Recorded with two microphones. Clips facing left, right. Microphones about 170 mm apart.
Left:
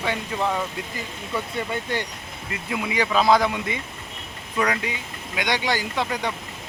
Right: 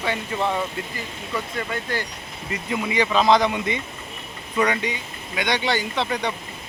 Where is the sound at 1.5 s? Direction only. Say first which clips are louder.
Left 1 dB; 20° left (ahead or behind).